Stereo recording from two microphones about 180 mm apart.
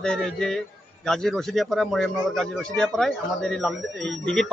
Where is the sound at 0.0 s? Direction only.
5° left (ahead or behind).